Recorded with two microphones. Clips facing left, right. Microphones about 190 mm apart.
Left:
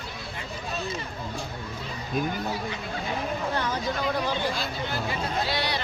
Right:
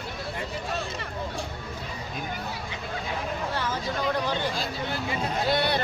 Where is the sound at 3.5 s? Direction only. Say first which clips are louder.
Left 2 dB; 15° left (ahead or behind).